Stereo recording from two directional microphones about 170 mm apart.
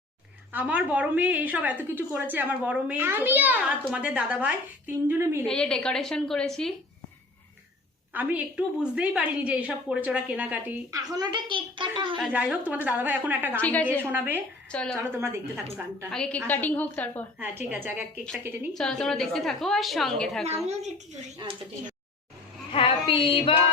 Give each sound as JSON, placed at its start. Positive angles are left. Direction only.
{"t": 0.5, "sound": "a woman's voice", "side_deg": -10}
{"t": 5.5, "sound": "a woman's voice", "side_deg": 5}
{"t": 8.1, "sound": "a woman's voice", "side_deg": -10}
{"t": 11.1, "sound": "a woman's voice", "side_deg": -25}
{"t": 12.2, "sound": "a woman's voice", "side_deg": -10}
{"t": 13.6, "sound": "a woman's voice", "side_deg": 10}
{"t": 14.0, "sound": "a woman's voice", "side_deg": -10}
{"t": 14.7, "sound": "a woman's voice", "side_deg": 5}
{"t": 14.9, "sound": "a woman's voice", "side_deg": -15}
{"t": 16.0, "sound": "a woman's voice", "side_deg": 5}
{"t": 17.4, "sound": "a woman's voice", "side_deg": -10}
{"t": 18.7, "sound": "a woman's voice", "side_deg": 5}
{"t": 22.7, "sound": "female singing", "side_deg": 30}